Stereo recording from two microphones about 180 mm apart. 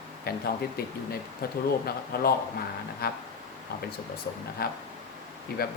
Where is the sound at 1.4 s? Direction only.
60° left (ahead or behind).